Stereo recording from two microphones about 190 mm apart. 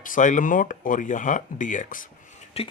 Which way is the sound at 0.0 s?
45° left (ahead or behind).